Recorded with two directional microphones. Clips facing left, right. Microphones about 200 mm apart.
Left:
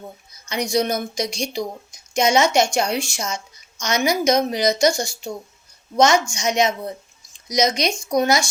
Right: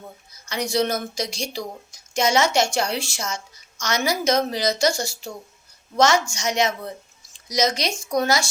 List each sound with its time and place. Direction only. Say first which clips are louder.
0.4 s a woman's voice: left 2 dB; 15° left (ahead or behind)